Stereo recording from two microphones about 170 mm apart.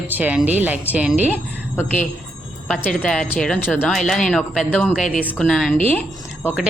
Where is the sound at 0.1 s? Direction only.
10° right (ahead or behind).